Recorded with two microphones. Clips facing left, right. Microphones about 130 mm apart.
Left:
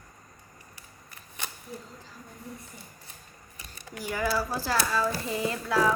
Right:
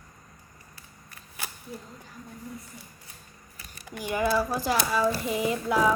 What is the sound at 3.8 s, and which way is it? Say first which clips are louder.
Speech: right 3 dB; 15° right (ahead or behind).